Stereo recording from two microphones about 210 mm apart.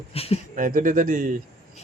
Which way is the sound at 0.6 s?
40° right (ahead or behind).